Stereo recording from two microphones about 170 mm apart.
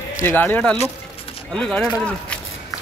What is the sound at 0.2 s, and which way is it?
Speech, 10° left (ahead or behind).